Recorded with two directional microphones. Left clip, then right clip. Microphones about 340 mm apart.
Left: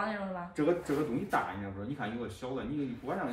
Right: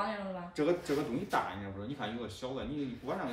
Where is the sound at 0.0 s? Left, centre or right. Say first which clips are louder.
Left 1 dB; centre.